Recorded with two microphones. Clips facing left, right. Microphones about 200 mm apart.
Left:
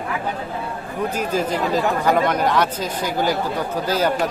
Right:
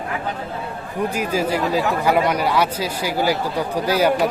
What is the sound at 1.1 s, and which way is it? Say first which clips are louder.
Speech: even; 10° right (ahead or behind).